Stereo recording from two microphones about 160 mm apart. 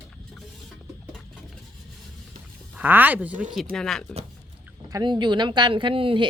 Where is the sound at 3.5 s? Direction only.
Centre (ahead or behind).